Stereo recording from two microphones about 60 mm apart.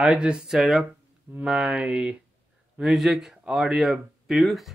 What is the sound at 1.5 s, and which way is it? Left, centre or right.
Speech, centre.